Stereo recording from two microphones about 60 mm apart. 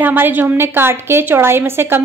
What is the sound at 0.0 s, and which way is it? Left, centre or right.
A woman's voice, right.